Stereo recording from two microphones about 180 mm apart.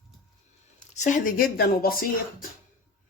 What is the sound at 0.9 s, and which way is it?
Speech, 45° left (ahead or behind).